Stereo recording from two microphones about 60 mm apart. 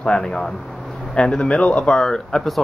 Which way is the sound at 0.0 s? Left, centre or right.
Centre.